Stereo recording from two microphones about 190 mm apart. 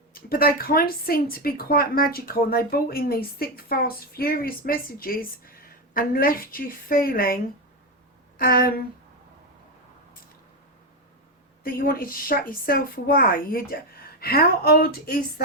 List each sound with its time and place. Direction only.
0.1 s a woman's voice: 50° left (ahead or behind)
8.4 s a woman's voice: 50° left (ahead or behind)
11.6 s a woman's voice: 50° left (ahead or behind)